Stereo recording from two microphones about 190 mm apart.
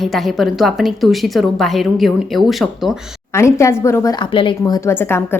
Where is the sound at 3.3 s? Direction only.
15° left (ahead or behind).